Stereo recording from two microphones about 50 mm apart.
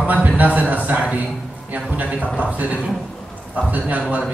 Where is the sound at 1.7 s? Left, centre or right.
Right.